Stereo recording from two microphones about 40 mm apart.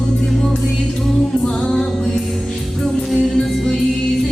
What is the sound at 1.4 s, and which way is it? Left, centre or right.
Music, centre.